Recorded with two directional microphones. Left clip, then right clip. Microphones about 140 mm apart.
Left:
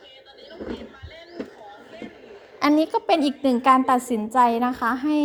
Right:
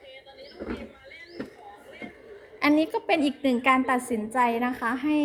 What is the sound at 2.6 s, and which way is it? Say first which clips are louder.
A woman's voice: left 3 dB; 30° left (ahead or behind).